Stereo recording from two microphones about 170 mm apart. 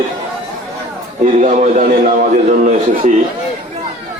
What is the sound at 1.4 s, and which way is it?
A man's voice, 45° right (ahead or behind).